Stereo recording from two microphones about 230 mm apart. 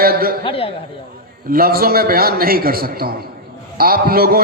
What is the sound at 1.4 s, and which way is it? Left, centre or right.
A man's voice, right.